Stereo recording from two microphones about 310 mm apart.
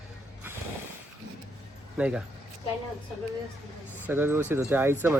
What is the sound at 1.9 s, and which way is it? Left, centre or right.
Speech, centre.